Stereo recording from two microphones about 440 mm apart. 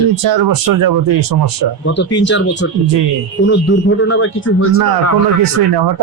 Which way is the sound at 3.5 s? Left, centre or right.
Left.